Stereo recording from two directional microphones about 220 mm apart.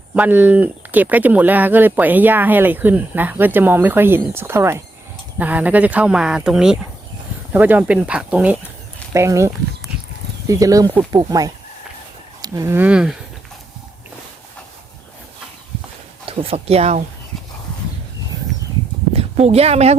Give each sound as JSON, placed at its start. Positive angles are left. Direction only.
{"t": 0.1, "sound": "speech", "side_deg": -5}
{"t": 16.2, "sound": "speech", "side_deg": -25}
{"t": 19.1, "sound": "speech", "side_deg": -30}